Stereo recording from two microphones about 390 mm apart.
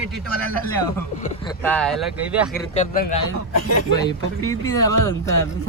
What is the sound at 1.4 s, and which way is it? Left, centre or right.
Speech, centre.